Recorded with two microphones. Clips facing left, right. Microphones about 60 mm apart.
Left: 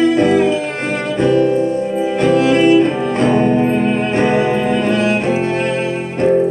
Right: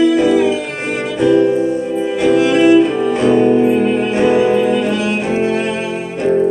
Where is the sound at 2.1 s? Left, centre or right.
Left.